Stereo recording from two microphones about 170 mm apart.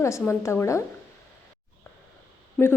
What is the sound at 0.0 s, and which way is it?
Speech, 15° left (ahead or behind).